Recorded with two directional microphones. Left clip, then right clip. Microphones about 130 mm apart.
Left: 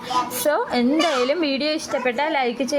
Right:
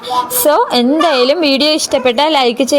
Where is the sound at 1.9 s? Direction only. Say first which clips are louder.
Right 10 dB; 50° right (ahead or behind).